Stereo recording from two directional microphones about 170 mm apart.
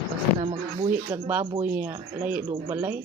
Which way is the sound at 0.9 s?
10° right (ahead or behind).